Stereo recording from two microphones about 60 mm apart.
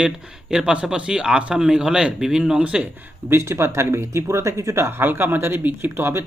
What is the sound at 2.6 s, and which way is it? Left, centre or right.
Speech, right.